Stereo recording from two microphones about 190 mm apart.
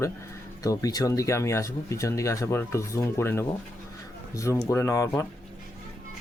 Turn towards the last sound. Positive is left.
turn(degrees=15)  # may be behind; listen again after turning